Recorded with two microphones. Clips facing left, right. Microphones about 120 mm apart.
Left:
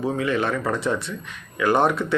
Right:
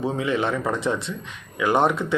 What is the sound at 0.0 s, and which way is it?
Speech, 20° right (ahead or behind).